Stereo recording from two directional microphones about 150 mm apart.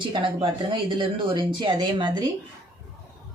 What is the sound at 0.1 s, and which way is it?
Speech, 35° right (ahead or behind).